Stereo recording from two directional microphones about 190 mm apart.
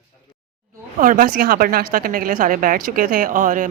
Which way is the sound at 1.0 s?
45° right (ahead or behind).